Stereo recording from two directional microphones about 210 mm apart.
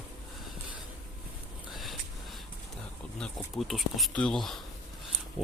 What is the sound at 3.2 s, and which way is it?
Speech, centre (ahead or behind).